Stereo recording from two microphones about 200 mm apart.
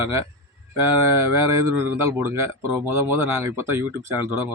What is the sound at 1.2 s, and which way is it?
Speech, 15° right (ahead or behind).